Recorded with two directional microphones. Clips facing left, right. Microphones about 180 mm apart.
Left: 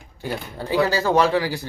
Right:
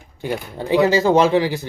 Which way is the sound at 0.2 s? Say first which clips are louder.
Right 4 dB; 20° right (ahead or behind).